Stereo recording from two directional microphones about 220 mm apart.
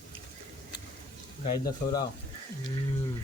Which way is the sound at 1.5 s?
15° left (ahead or behind).